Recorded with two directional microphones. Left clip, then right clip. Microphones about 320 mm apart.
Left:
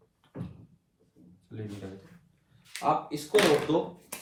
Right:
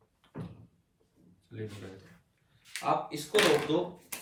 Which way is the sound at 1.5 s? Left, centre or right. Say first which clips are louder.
Right 1 dB; centre.